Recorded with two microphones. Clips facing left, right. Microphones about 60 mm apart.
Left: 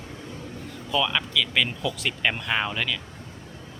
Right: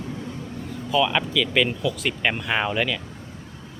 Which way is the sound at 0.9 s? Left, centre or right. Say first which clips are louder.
Right 4 dB; centre.